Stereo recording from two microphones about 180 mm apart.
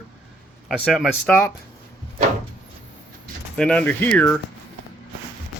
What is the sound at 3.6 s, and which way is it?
Speech, 5° left (ahead or behind).